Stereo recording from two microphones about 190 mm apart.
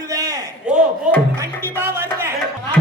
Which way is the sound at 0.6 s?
5° right (ahead or behind).